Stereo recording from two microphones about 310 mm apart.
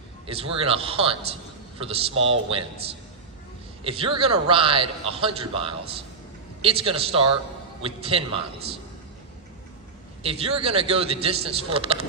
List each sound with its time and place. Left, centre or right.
0.6 s a man's voice: centre
3.8 s a man's voice: centre
10.2 s a man's voice: centre